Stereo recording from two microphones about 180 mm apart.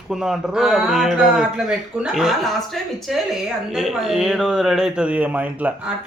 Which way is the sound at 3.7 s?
Centre (ahead or behind).